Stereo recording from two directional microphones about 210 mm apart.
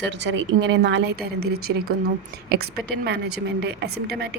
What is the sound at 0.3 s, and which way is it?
A woman's voice, 60° right (ahead or behind).